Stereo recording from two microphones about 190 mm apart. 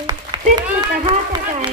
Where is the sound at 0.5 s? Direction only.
25° right (ahead or behind).